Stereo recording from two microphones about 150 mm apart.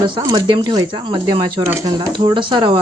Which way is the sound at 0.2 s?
25° right (ahead or behind).